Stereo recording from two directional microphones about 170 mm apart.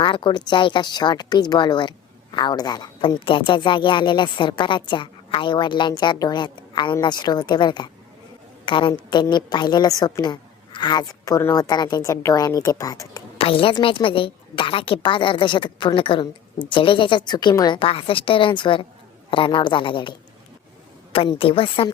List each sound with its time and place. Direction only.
0.0 s speech: 30° left (ahead or behind)
13.4 s a woman's voice: 30° left (ahead or behind)